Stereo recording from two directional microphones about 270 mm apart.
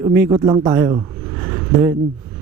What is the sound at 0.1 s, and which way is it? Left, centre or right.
Speech, centre.